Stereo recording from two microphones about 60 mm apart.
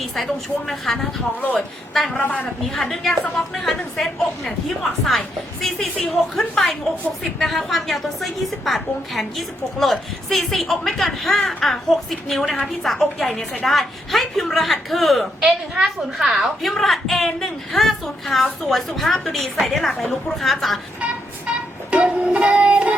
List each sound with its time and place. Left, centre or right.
0.7 s a woman's voice: centre
2.2 s speech: left
2.7 s a woman's voice: centre
5.6 s a sound: centre
7.4 s a woman's voice: centre
21.8 s music: right